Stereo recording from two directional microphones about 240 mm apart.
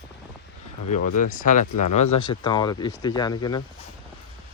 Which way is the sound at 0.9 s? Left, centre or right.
Left.